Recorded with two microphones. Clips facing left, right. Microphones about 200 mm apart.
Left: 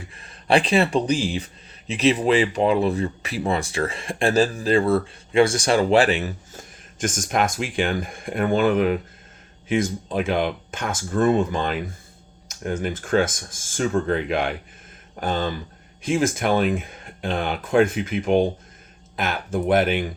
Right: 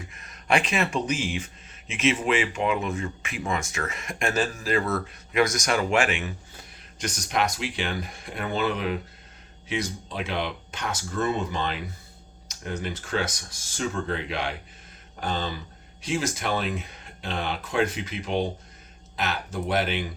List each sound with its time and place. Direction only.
0.0 s speech: 30° left (ahead or behind); by 20.1 s 50° left (ahead or behind)